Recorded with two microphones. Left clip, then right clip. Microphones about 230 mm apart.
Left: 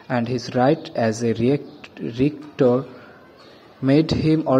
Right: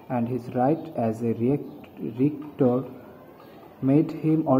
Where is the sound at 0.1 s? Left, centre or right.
Left.